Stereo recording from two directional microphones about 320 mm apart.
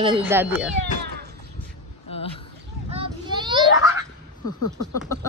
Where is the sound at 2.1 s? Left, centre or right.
Centre.